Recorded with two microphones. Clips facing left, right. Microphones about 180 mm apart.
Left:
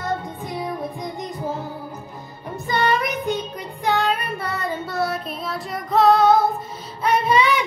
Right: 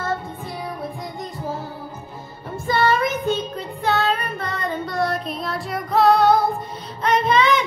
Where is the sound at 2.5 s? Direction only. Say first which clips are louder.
Right 2 dB; 20° left (ahead or behind).